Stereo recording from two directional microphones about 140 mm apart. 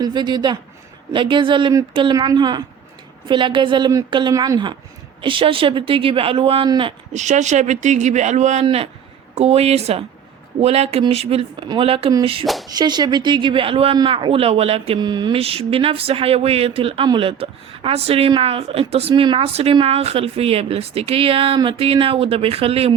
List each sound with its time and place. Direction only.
0.0 s speech: 30° right (ahead or behind)
7.1 s speech: 55° right (ahead or behind)
8.6 s a woman's voice: 45° right (ahead or behind)
12.6 s speech: 30° right (ahead or behind); by 14.9 s 45° right (ahead or behind)
15.0 s a woman's voice: 30° right (ahead or behind)